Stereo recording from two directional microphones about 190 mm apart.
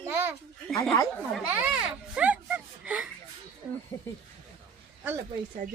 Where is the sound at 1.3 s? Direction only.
5° right (ahead or behind).